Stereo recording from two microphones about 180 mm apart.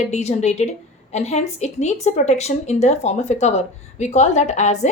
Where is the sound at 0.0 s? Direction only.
40° left (ahead or behind).